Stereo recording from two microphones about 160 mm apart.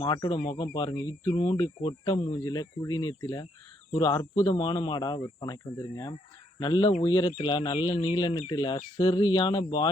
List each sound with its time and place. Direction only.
0.0 s speech: 25° left (ahead or behind)
6.6 s speech: 25° left (ahead or behind)